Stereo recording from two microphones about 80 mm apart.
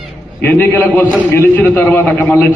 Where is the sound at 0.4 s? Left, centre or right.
Left.